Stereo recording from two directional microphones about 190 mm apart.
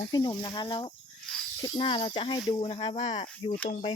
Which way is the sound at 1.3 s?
5° left (ahead or behind).